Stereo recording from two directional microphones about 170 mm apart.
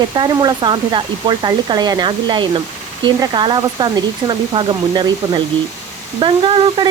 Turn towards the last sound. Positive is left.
turn(degrees=-30)  # may be behind; listen again after turning